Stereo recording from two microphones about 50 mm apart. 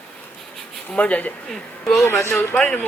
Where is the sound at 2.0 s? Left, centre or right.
Left.